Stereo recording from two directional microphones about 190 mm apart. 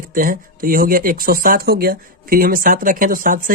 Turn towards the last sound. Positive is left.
turn(degrees=-45)  # may be behind; listen again after turning